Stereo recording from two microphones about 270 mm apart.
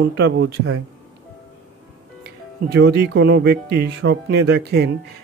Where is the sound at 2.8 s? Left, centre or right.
Right.